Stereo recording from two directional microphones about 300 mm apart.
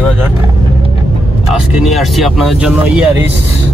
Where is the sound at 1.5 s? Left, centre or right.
Centre.